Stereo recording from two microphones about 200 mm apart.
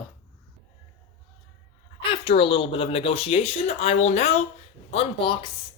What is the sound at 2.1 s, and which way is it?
Speech, 25° left (ahead or behind).